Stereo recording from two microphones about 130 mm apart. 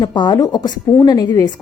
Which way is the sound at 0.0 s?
35° left (ahead or behind).